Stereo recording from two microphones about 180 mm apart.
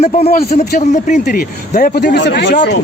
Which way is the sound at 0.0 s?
35° left (ahead or behind).